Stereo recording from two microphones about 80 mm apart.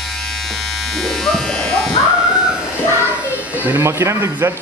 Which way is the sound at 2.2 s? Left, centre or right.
Centre.